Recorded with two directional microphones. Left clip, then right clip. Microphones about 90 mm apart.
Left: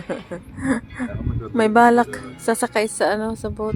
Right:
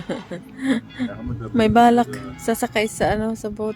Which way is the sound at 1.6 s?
5° right (ahead or behind).